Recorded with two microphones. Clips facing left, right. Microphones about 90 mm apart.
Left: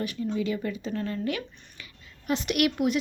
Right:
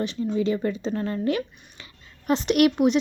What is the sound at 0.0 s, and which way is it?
Speech, 30° right (ahead or behind).